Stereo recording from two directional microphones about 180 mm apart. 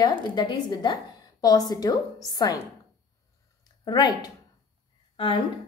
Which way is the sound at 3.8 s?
20° left (ahead or behind).